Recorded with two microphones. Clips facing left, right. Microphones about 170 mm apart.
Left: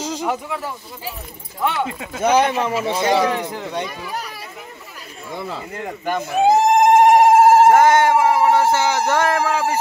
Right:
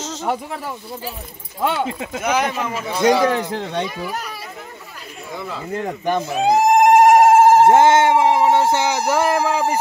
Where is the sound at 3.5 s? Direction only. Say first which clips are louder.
Right 2 dB; 90° right.